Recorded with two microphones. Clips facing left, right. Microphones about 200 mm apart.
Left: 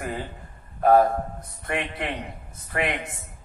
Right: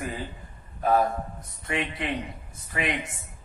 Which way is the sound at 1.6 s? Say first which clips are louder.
Left 1 dB; 55° left (ahead or behind).